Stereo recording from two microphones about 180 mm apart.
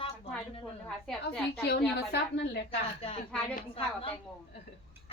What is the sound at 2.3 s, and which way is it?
Speech, 65° left (ahead or behind).